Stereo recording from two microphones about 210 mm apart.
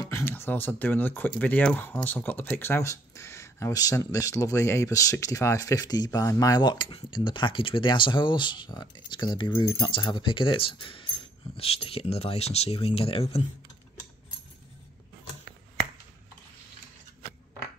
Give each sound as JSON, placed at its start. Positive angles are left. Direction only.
{"t": 0.1, "sound": "speech", "side_deg": 10}